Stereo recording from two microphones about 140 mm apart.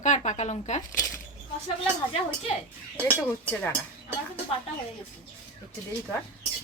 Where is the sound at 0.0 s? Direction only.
60° left (ahead or behind).